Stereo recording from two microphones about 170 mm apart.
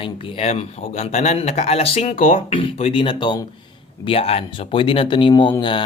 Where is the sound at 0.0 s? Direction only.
35° left (ahead or behind).